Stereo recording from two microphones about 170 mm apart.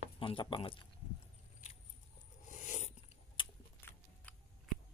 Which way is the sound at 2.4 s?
45° left (ahead or behind).